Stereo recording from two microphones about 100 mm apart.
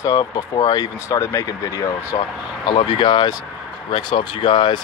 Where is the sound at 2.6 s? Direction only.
55° left (ahead or behind).